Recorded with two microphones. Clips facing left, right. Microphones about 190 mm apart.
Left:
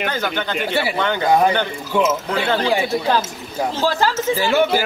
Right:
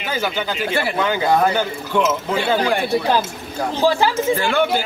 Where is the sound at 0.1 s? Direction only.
10° right (ahead or behind).